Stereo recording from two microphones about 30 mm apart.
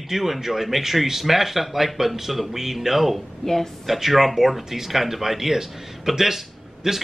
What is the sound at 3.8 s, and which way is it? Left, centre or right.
Speech, centre.